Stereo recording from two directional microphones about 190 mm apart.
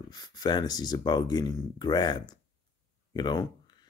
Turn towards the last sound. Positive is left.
turn(degrees=20)  # may be behind; listen again after turning